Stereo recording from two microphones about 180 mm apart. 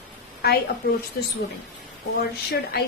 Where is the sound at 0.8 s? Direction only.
65° left (ahead or behind).